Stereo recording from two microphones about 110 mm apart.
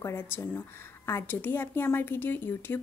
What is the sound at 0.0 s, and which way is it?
A woman's voice, 20° left (ahead or behind).